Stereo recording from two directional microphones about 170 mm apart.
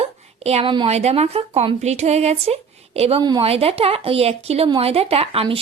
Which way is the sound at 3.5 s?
35° right (ahead or behind).